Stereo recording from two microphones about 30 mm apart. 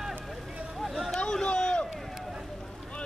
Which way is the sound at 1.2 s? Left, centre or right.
Left.